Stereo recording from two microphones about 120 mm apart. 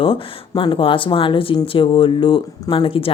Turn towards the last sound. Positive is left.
turn(degrees=45)  # may be behind; listen again after turning